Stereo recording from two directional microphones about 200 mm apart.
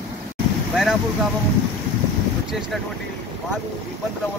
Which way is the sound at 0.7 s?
5° right (ahead or behind).